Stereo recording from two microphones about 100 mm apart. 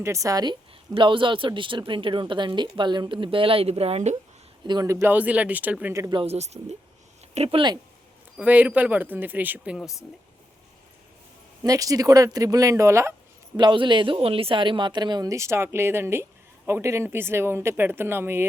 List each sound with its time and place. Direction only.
0.0 s speech: 30° right (ahead or behind)
0.9 s speech: 55° right (ahead or behind); by 4.0 s 85° right
4.6 s speech: 50° right (ahead or behind)
4.9 s speech: 30° right (ahead or behind)
5.1 s speech: 15° right (ahead or behind)
6.2 s speech: 90° right
7.3 s speech: 75° right (ahead or behind)
8.4 s speech: 15° right (ahead or behind)
11.6 s speech: 35° right (ahead or behind)
13.6 s speech: 50° right (ahead or behind); by 18.4 s 25° right (ahead or behind)